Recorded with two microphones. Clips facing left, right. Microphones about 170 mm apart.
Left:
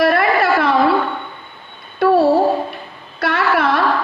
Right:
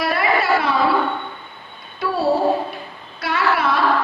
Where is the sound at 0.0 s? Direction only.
55° left (ahead or behind).